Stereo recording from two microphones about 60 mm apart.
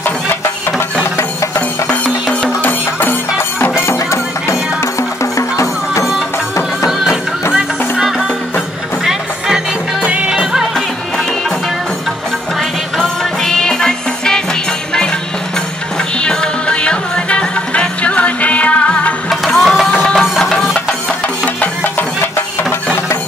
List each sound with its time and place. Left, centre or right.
2.6 s music: left
7.5 s music: centre
10.0 s music: centre
13.0 s music: centre
16.2 s music: centre
19.4 s music: centre
19.9 s music: centre
20.2 s music: centre